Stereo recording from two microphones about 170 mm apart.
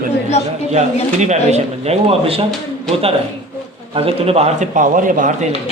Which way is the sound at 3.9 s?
35° right (ahead or behind).